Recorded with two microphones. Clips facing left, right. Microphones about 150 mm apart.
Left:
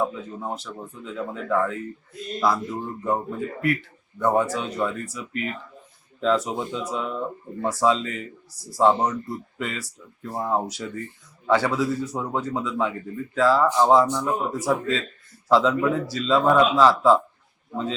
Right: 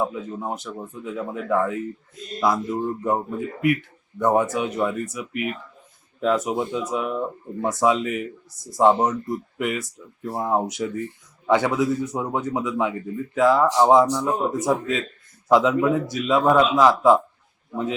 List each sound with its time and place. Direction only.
0.0 s speech: 15° right (ahead or behind)